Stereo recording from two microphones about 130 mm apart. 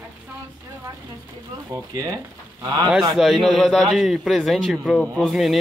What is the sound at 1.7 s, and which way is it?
Speech, 30° right (ahead or behind).